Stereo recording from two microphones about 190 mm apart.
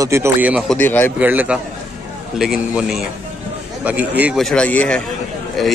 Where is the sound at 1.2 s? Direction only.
10° right (ahead or behind).